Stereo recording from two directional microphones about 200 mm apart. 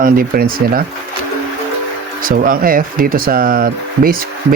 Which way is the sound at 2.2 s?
45° right (ahead or behind).